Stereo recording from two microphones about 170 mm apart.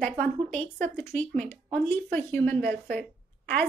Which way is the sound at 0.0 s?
10° left (ahead or behind).